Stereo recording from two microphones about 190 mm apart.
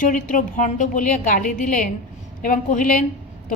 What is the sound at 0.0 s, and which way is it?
A woman's voice, 45° left (ahead or behind).